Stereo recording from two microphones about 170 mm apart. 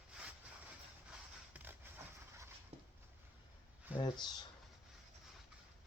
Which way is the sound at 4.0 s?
25° left (ahead or behind).